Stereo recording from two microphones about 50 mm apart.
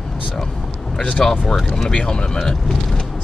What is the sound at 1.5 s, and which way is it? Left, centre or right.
Speech, centre.